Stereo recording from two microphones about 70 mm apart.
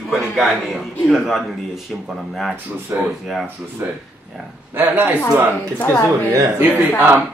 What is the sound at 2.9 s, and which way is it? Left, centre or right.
Speech, right.